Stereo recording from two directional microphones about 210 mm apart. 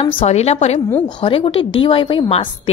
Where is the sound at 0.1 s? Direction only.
30° left (ahead or behind).